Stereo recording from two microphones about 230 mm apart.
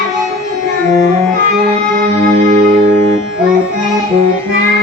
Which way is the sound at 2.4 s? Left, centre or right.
Right.